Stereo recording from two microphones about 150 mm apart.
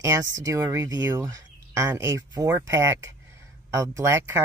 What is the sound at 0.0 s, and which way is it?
Speech, 25° right (ahead or behind).